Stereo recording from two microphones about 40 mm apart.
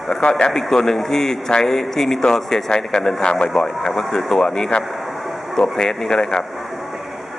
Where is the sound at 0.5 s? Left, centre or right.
Centre.